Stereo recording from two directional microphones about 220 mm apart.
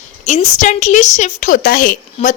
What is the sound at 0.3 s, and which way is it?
A woman's voice, 30° left (ahead or behind).